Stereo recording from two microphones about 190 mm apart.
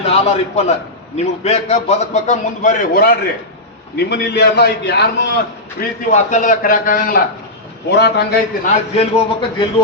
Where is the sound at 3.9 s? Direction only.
60° left (ahead or behind).